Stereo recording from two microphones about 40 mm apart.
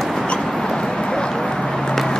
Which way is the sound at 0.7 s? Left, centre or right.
Centre.